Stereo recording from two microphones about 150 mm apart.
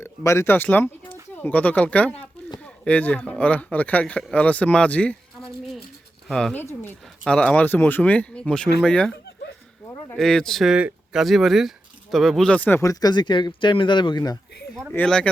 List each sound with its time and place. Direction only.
0.0 s speech: 15° left (ahead or behind)
9.8 s a sound: 20° left (ahead or behind)
10.2 s speech: 5° left (ahead or behind); by 14.3 s 30° left (ahead or behind)
14.9 s speech: 5° left (ahead or behind)